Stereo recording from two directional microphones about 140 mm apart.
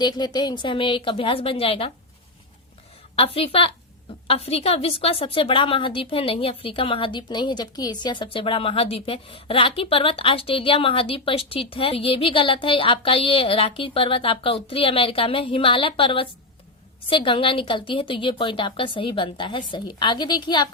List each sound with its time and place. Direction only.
0.0 s a woman's voice: 30° left (ahead or behind)
3.2 s a woman's voice: 45° left (ahead or behind)